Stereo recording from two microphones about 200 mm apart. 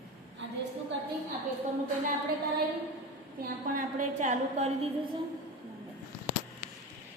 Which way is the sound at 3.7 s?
40° right (ahead or behind).